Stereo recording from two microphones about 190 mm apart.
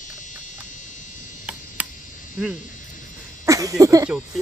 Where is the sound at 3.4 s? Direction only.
15° right (ahead or behind).